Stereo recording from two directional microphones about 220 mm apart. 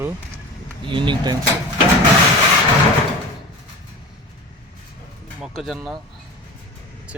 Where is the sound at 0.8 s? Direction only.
20° right (ahead or behind).